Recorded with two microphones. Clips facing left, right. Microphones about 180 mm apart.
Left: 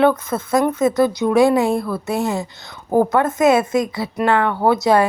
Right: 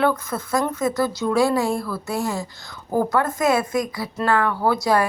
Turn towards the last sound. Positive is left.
turn(degrees=25)  # may be behind; listen again after turning